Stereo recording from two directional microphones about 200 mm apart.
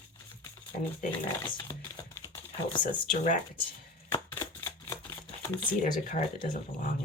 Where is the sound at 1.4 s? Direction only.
20° left (ahead or behind).